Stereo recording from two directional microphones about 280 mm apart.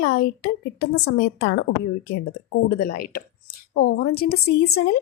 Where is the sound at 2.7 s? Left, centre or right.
Left.